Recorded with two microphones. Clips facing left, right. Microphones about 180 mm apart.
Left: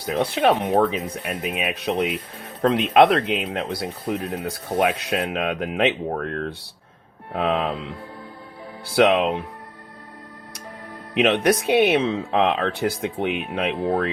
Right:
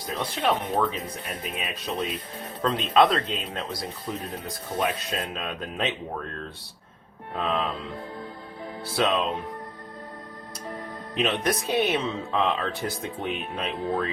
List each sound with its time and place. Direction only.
0.0 s speech: 70° left (ahead or behind)
9.0 s speech: 70° left (ahead or behind)
11.2 s speech: 70° left (ahead or behind)